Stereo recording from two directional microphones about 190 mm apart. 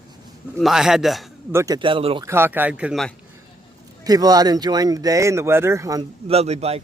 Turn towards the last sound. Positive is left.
turn(degrees=-35)  # may be behind; listen again after turning